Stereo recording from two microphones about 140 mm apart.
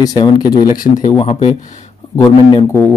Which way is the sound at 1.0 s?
50° left (ahead or behind).